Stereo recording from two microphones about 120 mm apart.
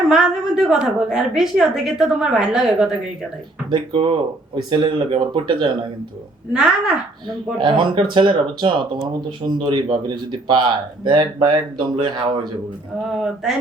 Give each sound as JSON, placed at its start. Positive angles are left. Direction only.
{"t": 0.1, "sound": "a woman's voice", "side_deg": -5}
{"t": 3.7, "sound": "speech", "side_deg": -50}
{"t": 6.5, "sound": "a woman's voice", "side_deg": -5}
{"t": 7.6, "sound": "speech", "side_deg": -40}
{"t": 11.0, "sound": "speech", "side_deg": -40}
{"t": 13.1, "sound": "a woman's voice", "side_deg": -5}